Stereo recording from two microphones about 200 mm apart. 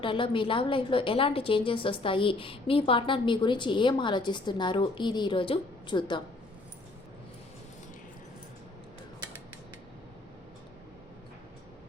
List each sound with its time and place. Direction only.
0.0 s a woman's voice: 25° left (ahead or behind)